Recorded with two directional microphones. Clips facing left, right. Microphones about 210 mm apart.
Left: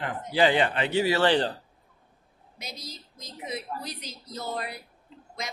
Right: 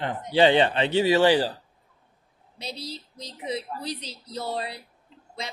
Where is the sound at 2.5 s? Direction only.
30° right (ahead or behind).